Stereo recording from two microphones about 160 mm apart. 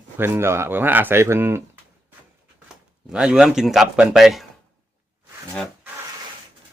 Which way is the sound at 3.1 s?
5° right (ahead or behind).